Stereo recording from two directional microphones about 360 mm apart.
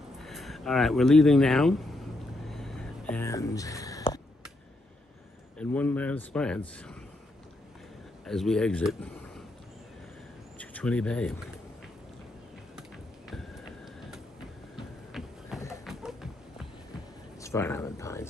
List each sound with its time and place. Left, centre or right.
0.2 s speech: centre
2.5 s a sound: centre
5.5 s speech: centre
8.3 s speech: centre
10.6 s speech: centre
14.8 s a sound: centre
17.4 s speech: centre